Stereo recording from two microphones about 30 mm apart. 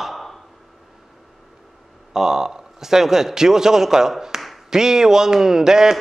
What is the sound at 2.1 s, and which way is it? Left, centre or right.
A man's voice, centre.